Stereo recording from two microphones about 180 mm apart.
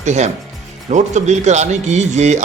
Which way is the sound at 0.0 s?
40° right (ahead or behind).